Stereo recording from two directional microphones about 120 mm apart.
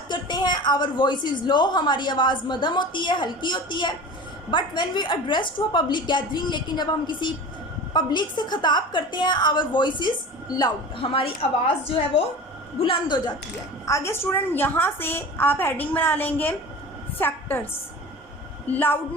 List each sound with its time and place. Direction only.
0.1 s a woman's voice: 40° left (ahead or behind)
12.8 s a woman's voice: 40° left (ahead or behind)
13.8 s a woman's voice: 25° left (ahead or behind)
18.7 s a woman's voice: 15° left (ahead or behind)